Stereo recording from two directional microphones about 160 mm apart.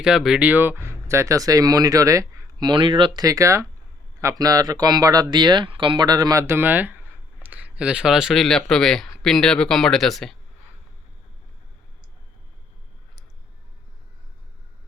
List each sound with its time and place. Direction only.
0.0 s speech: 5° right (ahead or behind)